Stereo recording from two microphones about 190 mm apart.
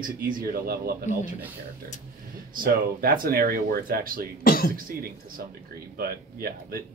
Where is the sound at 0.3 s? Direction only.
50° right (ahead or behind).